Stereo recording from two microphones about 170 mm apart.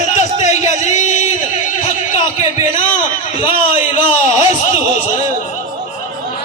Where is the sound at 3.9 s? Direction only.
30° left (ahead or behind).